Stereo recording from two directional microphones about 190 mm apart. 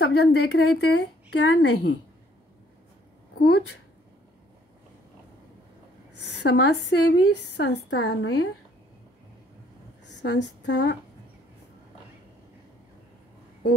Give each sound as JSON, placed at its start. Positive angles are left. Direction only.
{"t": 0.0, "sound": "a woman's voice", "side_deg": 60}
{"t": 3.3, "sound": "a woman's voice", "side_deg": 55}
{"t": 6.4, "sound": "a woman's voice", "side_deg": 60}
{"t": 10.2, "sound": "a woman's voice", "side_deg": 65}